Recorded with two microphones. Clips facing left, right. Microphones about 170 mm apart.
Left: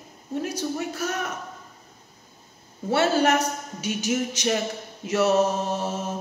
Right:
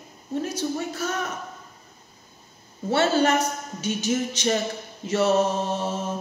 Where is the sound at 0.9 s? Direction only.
10° left (ahead or behind).